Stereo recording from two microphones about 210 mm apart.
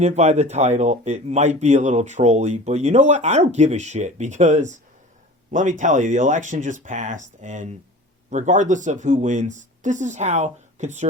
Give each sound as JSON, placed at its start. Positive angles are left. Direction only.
{"t": 0.0, "sound": "speech", "side_deg": -30}